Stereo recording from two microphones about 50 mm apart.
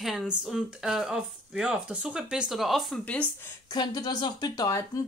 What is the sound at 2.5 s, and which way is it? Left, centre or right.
Speech, centre.